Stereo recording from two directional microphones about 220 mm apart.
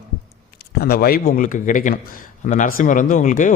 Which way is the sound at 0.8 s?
45° left (ahead or behind).